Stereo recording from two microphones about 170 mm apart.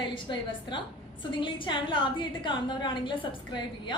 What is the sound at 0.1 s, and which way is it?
A woman's voice, 30° left (ahead or behind).